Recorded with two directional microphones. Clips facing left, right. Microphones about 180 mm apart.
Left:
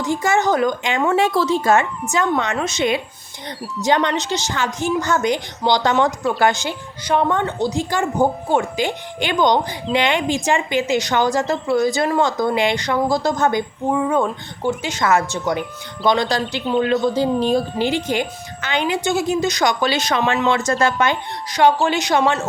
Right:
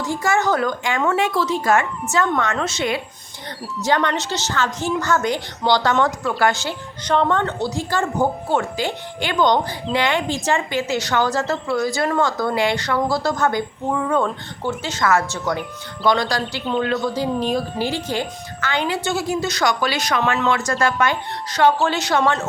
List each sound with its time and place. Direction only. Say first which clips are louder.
0.0 s a woman's voice: left 2 dB; 20° left (ahead or behind)
1.1 s a woman's voice: left 3 dB; 30° left (ahead or behind)
16.7 s speech: left 3 dB; centre (ahead or behind)
17.5 s a woman's voice: left 4 dB; 20° left (ahead or behind)